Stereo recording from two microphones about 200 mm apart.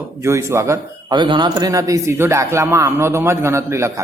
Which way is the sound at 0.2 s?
15° right (ahead or behind).